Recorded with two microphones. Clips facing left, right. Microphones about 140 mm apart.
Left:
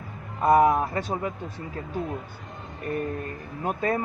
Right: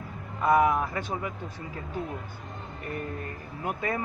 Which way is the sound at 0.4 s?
25° left (ahead or behind).